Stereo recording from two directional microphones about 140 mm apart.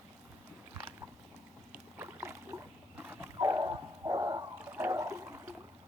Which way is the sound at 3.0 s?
15° right (ahead or behind).